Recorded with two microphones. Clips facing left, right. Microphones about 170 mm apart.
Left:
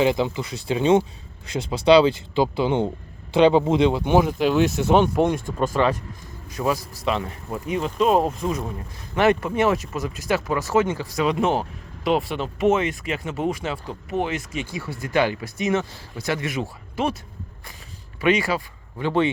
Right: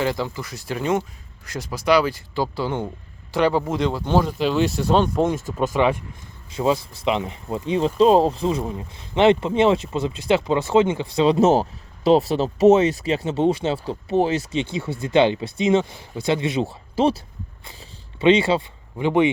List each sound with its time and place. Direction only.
0.0 s speech: 20° left (ahead or behind)
5.2 s speech: 5° right (ahead or behind)
6.6 s speech: 25° right (ahead or behind)
11.3 s speech: 40° right (ahead or behind)
18.2 s speech: 25° right (ahead or behind)